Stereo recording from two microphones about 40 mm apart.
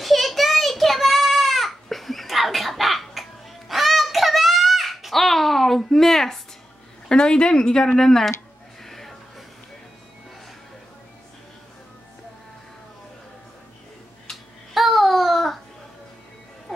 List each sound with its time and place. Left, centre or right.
0.0 s child singing: centre
7.1 s speech: left
8.8 s music: centre
14.3 s babbling: centre